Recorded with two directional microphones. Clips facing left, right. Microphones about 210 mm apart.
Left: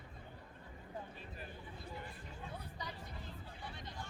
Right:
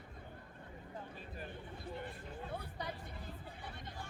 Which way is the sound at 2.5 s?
60° right (ahead or behind).